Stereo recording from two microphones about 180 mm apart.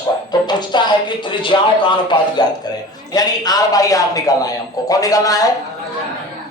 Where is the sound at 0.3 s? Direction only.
25° left (ahead or behind).